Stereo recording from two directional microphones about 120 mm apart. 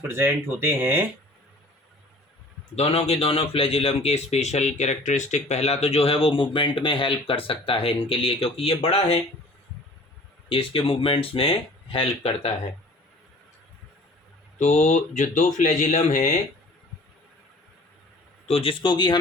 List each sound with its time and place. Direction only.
0.1 s speech: 20° right (ahead or behind)
2.7 s speech: 55° left (ahead or behind)
10.5 s speech: 45° left (ahead or behind)
14.6 s speech: 90° left
18.4 s speech: 55° left (ahead or behind); by 19.1 s 40° left (ahead or behind)